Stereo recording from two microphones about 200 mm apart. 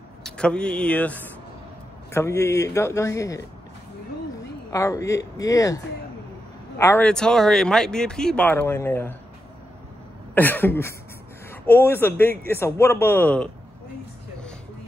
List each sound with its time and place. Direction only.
0.2 s speech: 5° left (ahead or behind)
4.7 s speech: 15° left (ahead or behind)
6.8 s speech: 10° left (ahead or behind)
10.3 s speech: 10° left (ahead or behind)